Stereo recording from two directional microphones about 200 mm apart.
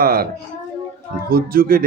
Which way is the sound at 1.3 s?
45° right (ahead or behind).